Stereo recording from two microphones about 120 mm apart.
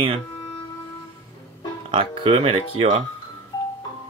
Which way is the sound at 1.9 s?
50° right (ahead or behind).